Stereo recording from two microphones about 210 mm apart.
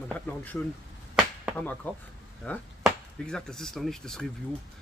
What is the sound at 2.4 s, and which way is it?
Speech, 5° left (ahead or behind).